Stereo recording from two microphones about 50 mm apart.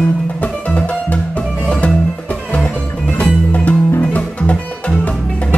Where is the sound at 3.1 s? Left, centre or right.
Left.